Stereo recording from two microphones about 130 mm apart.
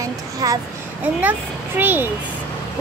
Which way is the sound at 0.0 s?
25° right (ahead or behind).